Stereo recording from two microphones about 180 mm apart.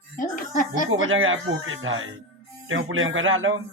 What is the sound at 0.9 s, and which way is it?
Speech, 90° right.